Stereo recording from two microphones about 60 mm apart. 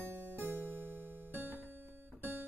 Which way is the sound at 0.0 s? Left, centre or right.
Right.